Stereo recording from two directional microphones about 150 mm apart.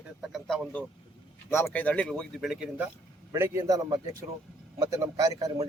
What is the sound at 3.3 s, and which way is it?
A man's voice, 20° right (ahead or behind).